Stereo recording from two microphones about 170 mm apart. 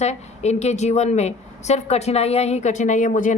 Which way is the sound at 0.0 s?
40° left (ahead or behind).